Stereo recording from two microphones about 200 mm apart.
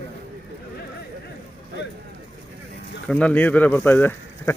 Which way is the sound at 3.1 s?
5° left (ahead or behind).